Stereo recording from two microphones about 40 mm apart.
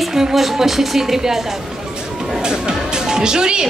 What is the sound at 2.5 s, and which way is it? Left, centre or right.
Music, centre.